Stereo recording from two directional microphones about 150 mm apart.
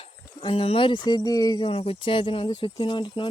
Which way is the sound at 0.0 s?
35° left (ahead or behind).